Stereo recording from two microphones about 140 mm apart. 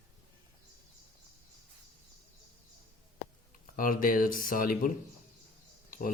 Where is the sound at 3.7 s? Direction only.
90° left.